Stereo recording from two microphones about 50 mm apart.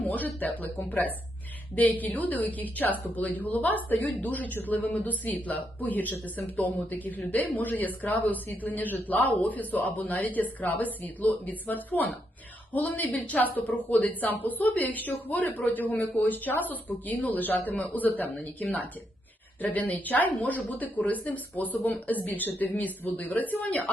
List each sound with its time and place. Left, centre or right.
0.0 s speech: left
19.6 s speech: left